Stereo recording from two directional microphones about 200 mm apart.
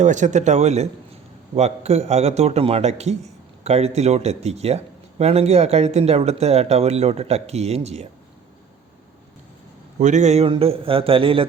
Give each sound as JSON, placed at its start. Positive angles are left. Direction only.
{"t": 0.0, "sound": "speech", "side_deg": -35}
{"t": 10.0, "sound": "a man's voice", "side_deg": -35}